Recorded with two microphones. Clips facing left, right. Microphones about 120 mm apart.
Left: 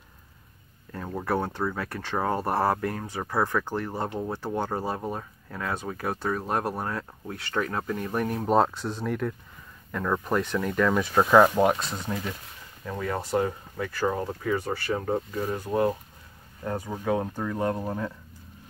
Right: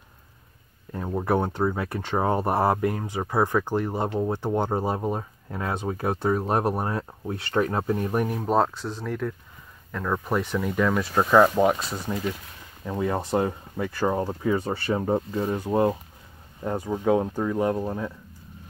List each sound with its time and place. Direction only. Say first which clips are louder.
0.9 s speech: right 4 dB; 15° right (ahead or behind)
8.1 s speech: right 2 dB; 10° right (ahead or behind)
8.4 s speech: left 4 dB; centre (ahead or behind)
12.8 s speech: right 4 dB; 20° right (ahead or behind)
17.8 s speech: right 1 dB; 5° right (ahead or behind)